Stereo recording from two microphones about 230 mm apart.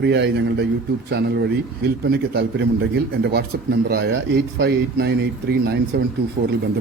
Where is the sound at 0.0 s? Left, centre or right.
Right.